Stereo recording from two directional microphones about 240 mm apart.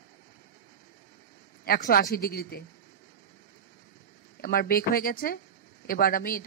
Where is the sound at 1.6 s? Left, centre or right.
Left.